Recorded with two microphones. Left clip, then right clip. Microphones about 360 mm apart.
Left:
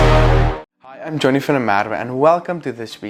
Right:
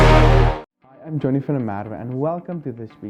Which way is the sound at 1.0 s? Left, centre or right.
Centre.